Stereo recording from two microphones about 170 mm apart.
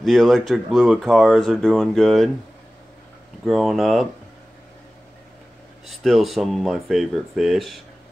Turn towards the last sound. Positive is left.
turn(degrees=0)  # may be behind; listen again after turning